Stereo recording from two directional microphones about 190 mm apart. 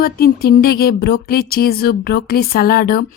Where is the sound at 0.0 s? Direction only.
50° left (ahead or behind).